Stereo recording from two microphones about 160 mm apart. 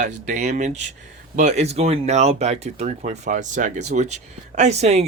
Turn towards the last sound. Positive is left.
turn(degrees=-45)  # may be behind; listen again after turning